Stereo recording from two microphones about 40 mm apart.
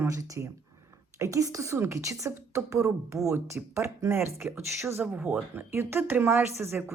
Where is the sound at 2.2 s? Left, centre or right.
Right.